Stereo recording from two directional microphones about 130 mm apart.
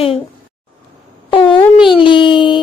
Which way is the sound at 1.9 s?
40° left (ahead or behind).